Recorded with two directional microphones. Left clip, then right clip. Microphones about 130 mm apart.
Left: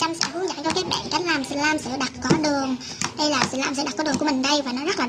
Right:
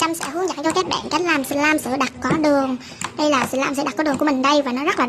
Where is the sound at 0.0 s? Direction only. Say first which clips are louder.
Right 3 dB; 45° right (ahead or behind).